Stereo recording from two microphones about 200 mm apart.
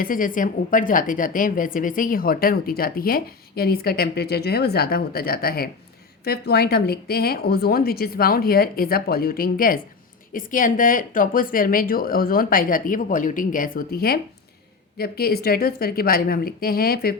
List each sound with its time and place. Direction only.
0.0 s a woman's voice: 45° left (ahead or behind)